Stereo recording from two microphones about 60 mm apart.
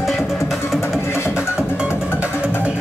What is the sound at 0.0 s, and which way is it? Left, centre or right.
Music, centre.